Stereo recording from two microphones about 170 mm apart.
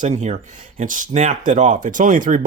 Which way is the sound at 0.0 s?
45° right (ahead or behind).